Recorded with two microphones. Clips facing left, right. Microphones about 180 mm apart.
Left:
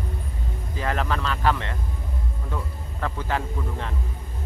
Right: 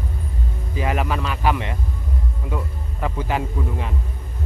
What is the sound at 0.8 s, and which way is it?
Speech, 15° right (ahead or behind).